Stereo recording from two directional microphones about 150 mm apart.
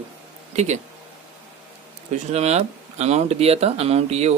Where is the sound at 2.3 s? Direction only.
45° right (ahead or behind).